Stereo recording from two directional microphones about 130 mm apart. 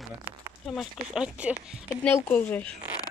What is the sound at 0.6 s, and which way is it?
Speech, 5° right (ahead or behind).